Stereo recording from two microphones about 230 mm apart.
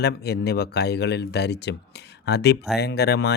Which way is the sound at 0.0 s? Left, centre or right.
Left.